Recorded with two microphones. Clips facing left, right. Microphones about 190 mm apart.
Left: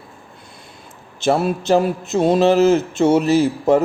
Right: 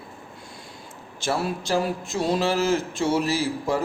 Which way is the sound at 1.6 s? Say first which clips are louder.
Left 9 dB; 20° left (ahead or behind).